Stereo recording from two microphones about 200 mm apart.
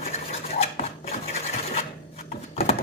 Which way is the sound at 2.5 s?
30° left (ahead or behind).